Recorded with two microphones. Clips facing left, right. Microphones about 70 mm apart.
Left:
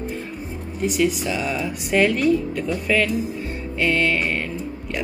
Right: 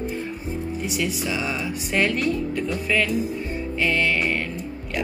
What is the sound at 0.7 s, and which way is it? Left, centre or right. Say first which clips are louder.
Speech: left 9 dB; centre.